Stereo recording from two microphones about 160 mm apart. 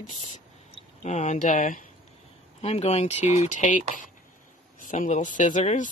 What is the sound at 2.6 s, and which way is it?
Speech, 40° left (ahead or behind).